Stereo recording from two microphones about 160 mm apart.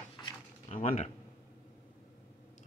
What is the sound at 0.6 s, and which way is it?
Speech, 45° left (ahead or behind).